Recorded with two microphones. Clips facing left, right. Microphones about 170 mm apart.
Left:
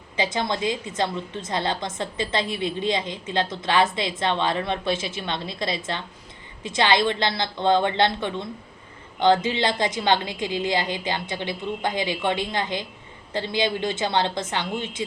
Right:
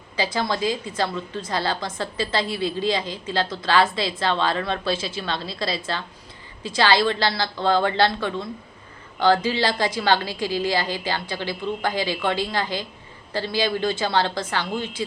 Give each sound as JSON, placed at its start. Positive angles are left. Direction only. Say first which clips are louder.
{"t": 0.2, "sound": "a woman's voice", "louder": "right 1 dB", "side_deg": 20}